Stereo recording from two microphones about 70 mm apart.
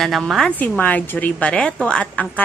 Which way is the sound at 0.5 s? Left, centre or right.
Left.